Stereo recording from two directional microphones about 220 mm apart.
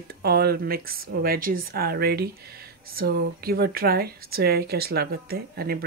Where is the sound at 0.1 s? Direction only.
45° right (ahead or behind).